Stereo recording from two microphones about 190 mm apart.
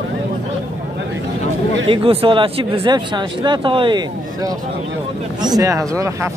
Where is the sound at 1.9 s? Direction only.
30° right (ahead or behind).